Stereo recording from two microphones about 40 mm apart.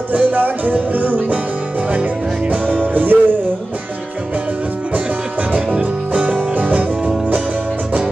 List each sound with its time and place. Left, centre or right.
0.1 s music: right
2.5 s music: right
5.5 s music: right